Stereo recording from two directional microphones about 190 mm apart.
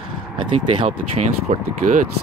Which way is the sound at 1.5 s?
45° right (ahead or behind).